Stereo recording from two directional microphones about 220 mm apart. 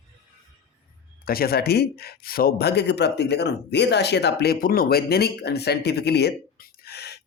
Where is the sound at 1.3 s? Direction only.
45° left (ahead or behind).